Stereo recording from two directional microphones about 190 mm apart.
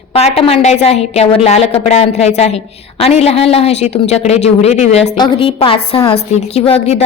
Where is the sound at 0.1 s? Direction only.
30° left (ahead or behind).